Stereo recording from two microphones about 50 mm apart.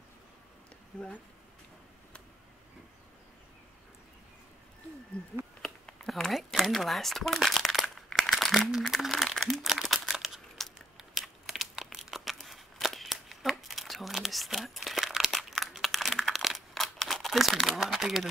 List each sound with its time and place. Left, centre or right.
0.9 s speech: left
5.6 s a sound: centre
8.2 s crumpling: centre
8.8 s speech: centre
9.5 s crumpling: centre